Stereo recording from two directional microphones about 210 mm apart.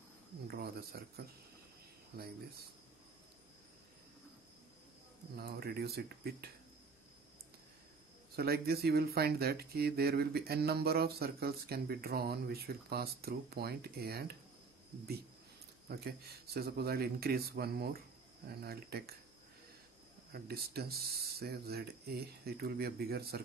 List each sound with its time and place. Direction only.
0.5 s speech: 45° right (ahead or behind)
5.3 s speech: 50° right (ahead or behind)
8.4 s speech: 45° right (ahead or behind)
15.9 s speech: 50° right (ahead or behind)
20.3 s speech: 50° right (ahead or behind)